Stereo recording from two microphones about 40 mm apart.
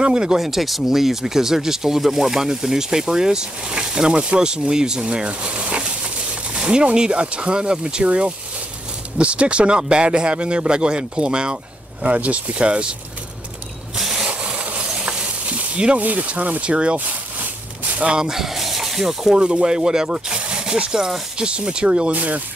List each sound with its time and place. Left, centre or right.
0.0 s speech: right
0.4 s speech: centre
5.2 s speech: right
12.0 s speech: right
15.7 s speech: right
16.0 s speech: right
16.7 s speech: right
18.2 s speech: centre
19.3 s speech: right